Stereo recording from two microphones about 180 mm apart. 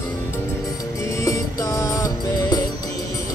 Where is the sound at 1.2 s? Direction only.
15° left (ahead or behind).